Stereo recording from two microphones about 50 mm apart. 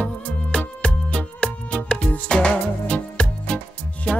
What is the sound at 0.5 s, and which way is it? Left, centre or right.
Music, left.